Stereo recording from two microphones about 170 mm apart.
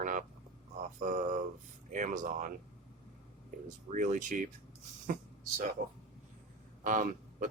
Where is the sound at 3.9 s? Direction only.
45° right (ahead or behind).